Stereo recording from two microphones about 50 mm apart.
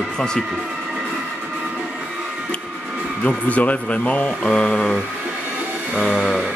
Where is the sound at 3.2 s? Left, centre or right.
Left.